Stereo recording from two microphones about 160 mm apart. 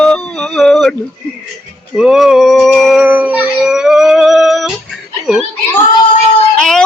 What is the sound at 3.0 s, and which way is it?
Howl, 10° right (ahead or behind).